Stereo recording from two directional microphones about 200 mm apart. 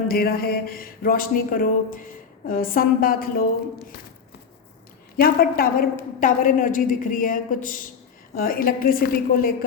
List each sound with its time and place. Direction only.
0.1 s speech: 50° left (ahead or behind)
5.1 s a woman's voice: 50° left (ahead or behind)